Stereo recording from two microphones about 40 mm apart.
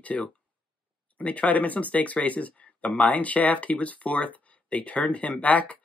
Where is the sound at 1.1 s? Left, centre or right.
Left.